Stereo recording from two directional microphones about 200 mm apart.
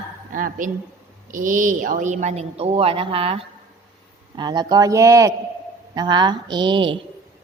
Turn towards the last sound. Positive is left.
turn(degrees=-25)  # may be behind; listen again after turning